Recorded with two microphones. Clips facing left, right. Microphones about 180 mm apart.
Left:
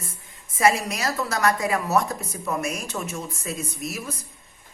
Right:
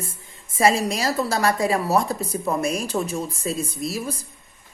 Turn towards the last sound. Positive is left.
turn(degrees=-30)  # may be behind; listen again after turning